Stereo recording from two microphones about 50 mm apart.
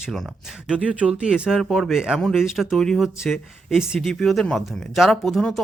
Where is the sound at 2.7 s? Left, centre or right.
Centre.